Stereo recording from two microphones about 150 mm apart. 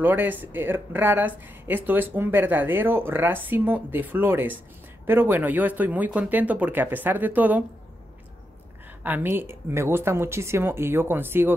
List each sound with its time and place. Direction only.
0.0 s speech: 10° right (ahead or behind)
9.0 s speech: 15° right (ahead or behind)